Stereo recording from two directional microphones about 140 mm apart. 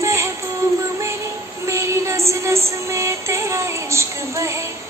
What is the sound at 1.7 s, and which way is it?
Music, 20° right (ahead or behind).